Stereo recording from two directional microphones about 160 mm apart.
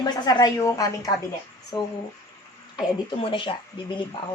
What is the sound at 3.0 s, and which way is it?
Speech, 35° left (ahead or behind).